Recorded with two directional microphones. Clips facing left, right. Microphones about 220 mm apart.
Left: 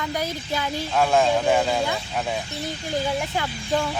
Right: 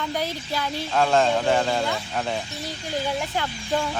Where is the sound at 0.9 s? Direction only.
5° left (ahead or behind).